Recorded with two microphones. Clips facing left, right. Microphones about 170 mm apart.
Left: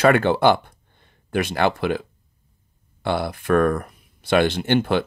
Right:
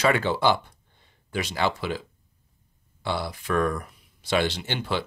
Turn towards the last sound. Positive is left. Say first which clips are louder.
# left 9 dB
turn(degrees=55)  # may be behind; listen again after turning